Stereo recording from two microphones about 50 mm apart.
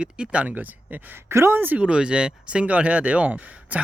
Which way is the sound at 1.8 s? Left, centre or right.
Centre.